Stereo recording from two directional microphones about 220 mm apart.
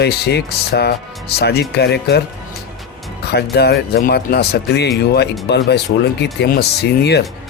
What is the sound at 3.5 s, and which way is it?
Speech, 45° left (ahead or behind).